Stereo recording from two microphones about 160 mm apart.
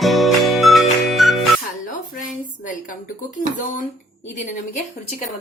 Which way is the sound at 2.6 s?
55° left (ahead or behind).